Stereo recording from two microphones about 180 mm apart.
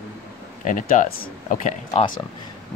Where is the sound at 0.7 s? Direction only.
45° left (ahead or behind).